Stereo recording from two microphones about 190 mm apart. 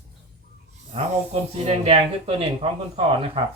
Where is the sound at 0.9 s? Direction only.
35° right (ahead or behind).